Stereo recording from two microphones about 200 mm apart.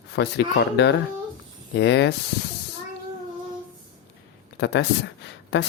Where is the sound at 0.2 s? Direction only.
60° left (ahead or behind).